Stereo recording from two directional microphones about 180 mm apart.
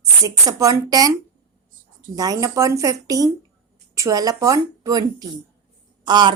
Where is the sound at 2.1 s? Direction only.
20° right (ahead or behind).